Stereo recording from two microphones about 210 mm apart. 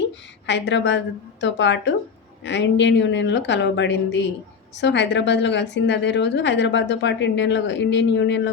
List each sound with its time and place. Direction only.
0.0 s a woman's voice: 55° left (ahead or behind)